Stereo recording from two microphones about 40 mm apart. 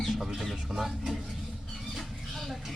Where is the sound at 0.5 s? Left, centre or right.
Centre.